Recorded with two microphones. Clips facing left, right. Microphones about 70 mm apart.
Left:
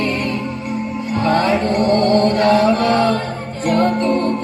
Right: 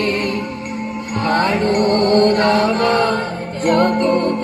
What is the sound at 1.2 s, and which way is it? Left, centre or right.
Music, right.